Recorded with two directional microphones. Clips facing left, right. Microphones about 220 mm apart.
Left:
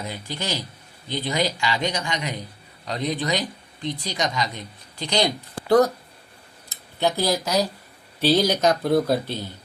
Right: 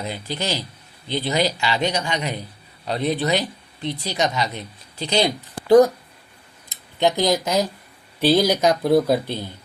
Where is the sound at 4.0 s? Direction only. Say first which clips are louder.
Right 5 dB; 20° right (ahead or behind).